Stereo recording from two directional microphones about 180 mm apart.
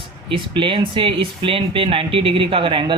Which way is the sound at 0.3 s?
25° right (ahead or behind).